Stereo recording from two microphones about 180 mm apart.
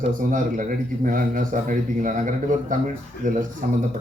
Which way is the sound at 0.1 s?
50° right (ahead or behind).